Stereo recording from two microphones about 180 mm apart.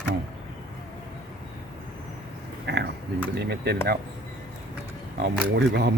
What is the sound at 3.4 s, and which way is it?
Speech, 65° right (ahead or behind).